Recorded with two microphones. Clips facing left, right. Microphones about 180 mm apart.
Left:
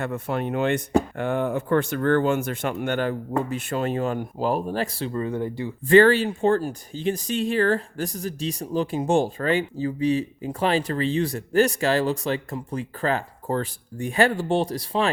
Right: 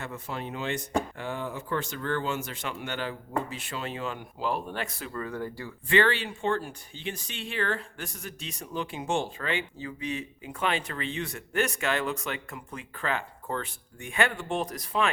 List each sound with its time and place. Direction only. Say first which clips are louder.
0.0 s speech: left 9 dB; 60° left (ahead or behind); by 5.7 s 20° left (ahead or behind)
5.9 s speech: left 10 dB; 40° left (ahead or behind)